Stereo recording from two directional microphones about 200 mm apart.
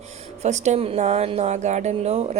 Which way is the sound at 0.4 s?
35° right (ahead or behind).